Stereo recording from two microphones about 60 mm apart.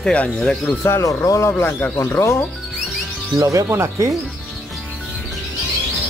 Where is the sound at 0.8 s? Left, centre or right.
Left.